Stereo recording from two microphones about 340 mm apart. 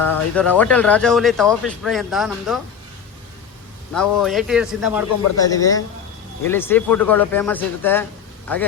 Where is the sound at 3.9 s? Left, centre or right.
Centre.